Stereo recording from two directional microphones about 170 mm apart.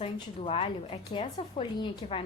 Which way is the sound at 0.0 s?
35° left (ahead or behind).